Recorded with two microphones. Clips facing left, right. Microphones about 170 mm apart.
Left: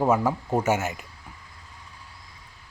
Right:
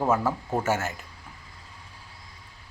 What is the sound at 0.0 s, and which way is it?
Speech, 15° left (ahead or behind).